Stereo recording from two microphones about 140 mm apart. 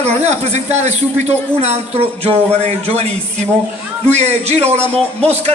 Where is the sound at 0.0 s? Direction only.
55° right (ahead or behind).